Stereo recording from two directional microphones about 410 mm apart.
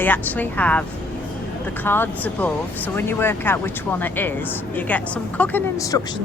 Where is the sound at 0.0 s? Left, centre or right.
Centre.